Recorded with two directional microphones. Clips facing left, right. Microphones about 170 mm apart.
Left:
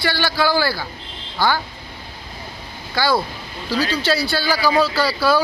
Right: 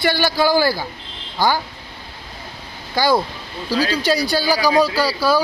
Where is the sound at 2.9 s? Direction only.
15° right (ahead or behind).